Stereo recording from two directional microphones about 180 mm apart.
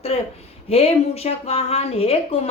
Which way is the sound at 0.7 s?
35° left (ahead or behind).